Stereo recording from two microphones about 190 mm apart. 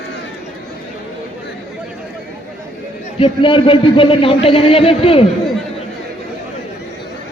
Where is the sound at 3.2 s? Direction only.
25° left (ahead or behind).